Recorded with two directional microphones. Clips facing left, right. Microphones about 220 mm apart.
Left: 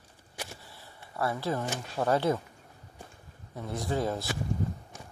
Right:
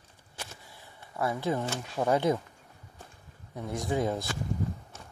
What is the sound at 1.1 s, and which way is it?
Speech, 15° right (ahead or behind).